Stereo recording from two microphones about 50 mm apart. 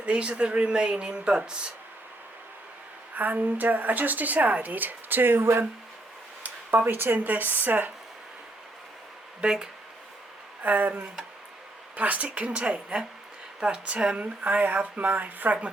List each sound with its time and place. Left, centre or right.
0.0 s speech: right
3.2 s a woman's voice: right
6.4 s speech: right
9.4 s speech: centre
10.6 s speech: right
13.6 s speech: centre
14.4 s a woman's voice: right